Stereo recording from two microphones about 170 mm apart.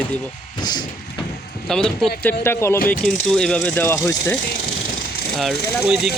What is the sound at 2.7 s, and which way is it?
Speech, 55° left (ahead or behind).